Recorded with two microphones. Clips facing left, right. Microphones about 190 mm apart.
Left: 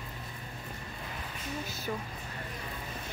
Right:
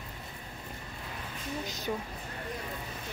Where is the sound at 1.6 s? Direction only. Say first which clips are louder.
Right 2 dB; 15° right (ahead or behind).